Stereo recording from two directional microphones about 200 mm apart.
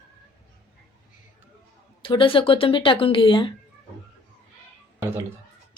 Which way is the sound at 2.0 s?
25° left (ahead or behind).